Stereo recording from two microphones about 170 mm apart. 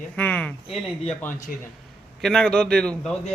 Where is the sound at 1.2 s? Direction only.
10° left (ahead or behind).